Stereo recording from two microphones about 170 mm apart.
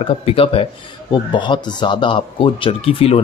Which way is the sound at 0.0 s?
35° left (ahead or behind).